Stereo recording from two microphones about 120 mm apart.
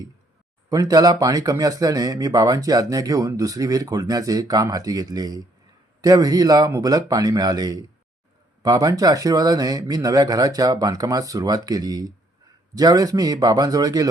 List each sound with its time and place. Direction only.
0.7 s speech: 30° right (ahead or behind)